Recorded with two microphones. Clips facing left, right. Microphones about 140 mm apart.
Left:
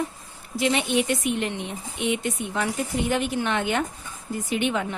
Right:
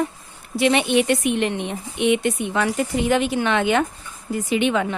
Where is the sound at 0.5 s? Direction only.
70° right (ahead or behind).